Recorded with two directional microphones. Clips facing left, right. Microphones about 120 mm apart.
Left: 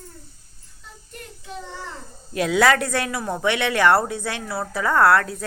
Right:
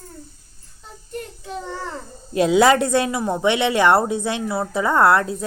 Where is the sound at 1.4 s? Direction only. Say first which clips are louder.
Right 2 dB; 40° right (ahead or behind).